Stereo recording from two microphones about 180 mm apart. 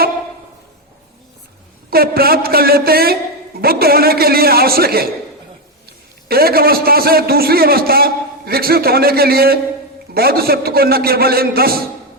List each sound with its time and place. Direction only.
1.9 s a man's voice: 55° right (ahead or behind)
6.2 s a man's voice: 55° right (ahead or behind)